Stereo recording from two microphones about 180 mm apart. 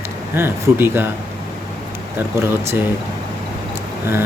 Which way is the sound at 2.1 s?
15° right (ahead or behind).